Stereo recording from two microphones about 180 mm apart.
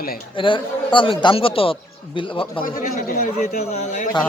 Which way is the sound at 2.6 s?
50° left (ahead or behind).